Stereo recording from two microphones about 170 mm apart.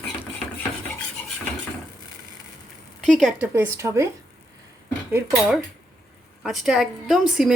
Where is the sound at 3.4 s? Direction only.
10° right (ahead or behind).